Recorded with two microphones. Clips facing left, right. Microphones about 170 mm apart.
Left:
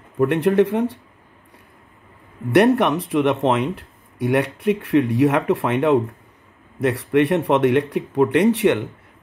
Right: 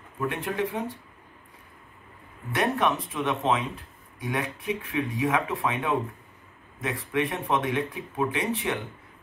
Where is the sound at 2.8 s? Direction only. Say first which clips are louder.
Left 8 dB; 75° left (ahead or behind).